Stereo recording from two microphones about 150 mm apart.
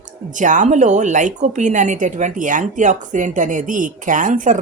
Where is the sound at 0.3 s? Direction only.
55° right (ahead or behind).